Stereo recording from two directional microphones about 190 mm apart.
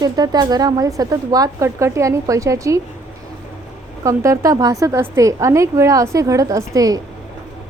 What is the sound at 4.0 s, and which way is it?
A woman's voice, 15° right (ahead or behind).